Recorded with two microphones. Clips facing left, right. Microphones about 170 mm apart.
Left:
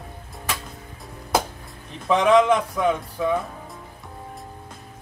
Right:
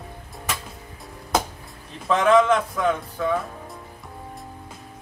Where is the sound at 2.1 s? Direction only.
15° left (ahead or behind).